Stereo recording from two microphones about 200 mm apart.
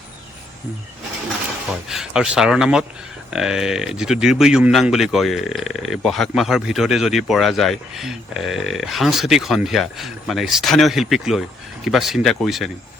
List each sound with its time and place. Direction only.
1.9 s speech: 5° right (ahead or behind)